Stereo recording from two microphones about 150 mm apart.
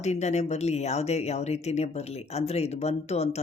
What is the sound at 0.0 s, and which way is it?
Speech, 50° left (ahead or behind).